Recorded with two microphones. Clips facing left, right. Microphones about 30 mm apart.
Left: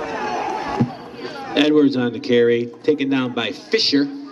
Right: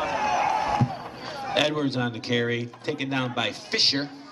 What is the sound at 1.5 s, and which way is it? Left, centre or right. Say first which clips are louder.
Speech: left 10 dB; centre.